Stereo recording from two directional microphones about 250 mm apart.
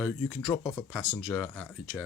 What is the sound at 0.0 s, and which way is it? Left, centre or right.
Speech, centre.